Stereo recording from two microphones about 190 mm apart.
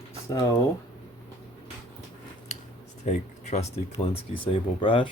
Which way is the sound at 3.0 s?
35° left (ahead or behind).